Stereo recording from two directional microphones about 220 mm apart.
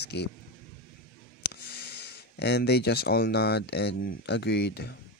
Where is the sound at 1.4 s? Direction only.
50° left (ahead or behind).